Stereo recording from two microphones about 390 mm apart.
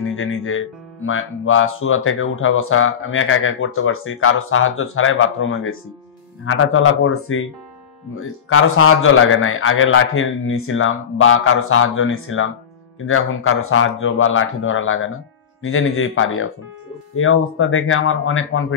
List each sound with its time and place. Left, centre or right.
0.0 s speech: left